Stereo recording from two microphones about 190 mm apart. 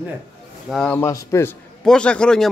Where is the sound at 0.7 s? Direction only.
5° left (ahead or behind).